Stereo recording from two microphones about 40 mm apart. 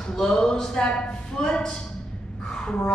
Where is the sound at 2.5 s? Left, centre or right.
Centre.